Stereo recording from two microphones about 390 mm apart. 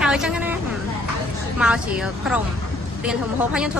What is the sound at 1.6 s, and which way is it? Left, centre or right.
Speech, centre.